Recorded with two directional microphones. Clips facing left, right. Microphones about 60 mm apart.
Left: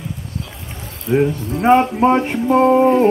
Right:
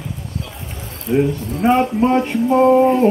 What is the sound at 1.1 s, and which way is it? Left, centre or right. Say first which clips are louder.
Speech: left 1 dB; centre.